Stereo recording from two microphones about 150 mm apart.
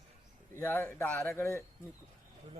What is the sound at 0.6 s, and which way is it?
Speech, 15° left (ahead or behind).